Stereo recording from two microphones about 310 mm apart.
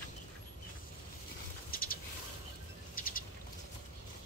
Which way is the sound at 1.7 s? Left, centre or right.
Left.